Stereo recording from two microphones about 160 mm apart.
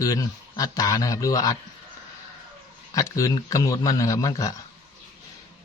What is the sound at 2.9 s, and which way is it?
Speech, 20° left (ahead or behind).